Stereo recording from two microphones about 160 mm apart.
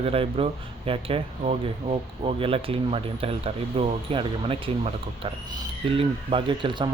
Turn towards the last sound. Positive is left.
turn(degrees=-30)  # may be behind; listen again after turning